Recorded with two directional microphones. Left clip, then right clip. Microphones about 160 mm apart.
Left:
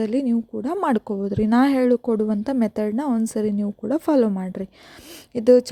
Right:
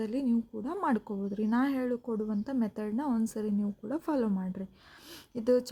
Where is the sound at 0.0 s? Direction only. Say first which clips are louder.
Left 9 dB; 45° left (ahead or behind).